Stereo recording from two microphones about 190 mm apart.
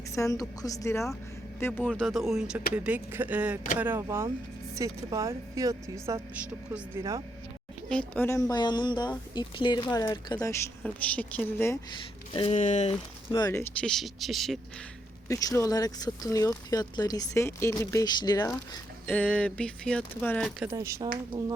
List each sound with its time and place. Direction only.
0.1 s a woman's voice: 15° left (ahead or behind)
1.9 s a woman's voice: centre (ahead or behind)
7.9 s speech: 5° left (ahead or behind)
10.8 s a woman's voice: 5° left (ahead or behind)
12.3 s speech: 30° left (ahead or behind)
12.5 s speech: 40° left (ahead or behind)
13.3 s a woman's voice: 15° left (ahead or behind)
13.8 s speech: centre (ahead or behind)
15.3 s speech: 15° left (ahead or behind)
19.0 s speech: 5° left (ahead or behind)
20.7 s a woman's voice: 15° right (ahead or behind)